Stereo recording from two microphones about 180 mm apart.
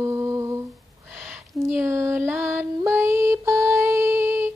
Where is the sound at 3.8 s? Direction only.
10° right (ahead or behind).